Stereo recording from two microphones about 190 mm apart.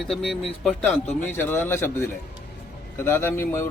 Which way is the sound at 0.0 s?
Centre (ahead or behind).